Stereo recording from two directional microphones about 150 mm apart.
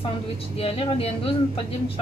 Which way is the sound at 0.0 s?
40° left (ahead or behind).